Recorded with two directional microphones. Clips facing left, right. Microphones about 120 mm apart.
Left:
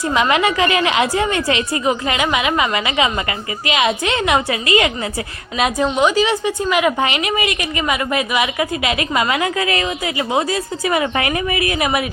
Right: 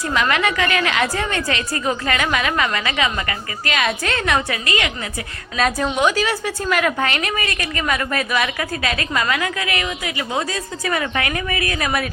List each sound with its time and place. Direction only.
0.1 s a woman's voice: 25° left (ahead or behind)
1.9 s a woman's voice: 15° left (ahead or behind)
5.5 s a woman's voice: 10° left (ahead or behind)